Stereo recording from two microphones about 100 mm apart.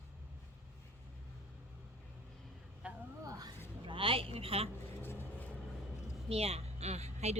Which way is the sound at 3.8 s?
60° right (ahead or behind).